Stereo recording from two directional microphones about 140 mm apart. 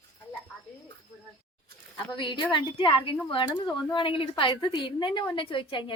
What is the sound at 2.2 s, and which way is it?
A woman's voice, 35° left (ahead or behind).